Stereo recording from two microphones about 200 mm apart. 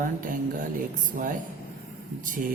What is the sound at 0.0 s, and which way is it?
Speech, 40° right (ahead or behind).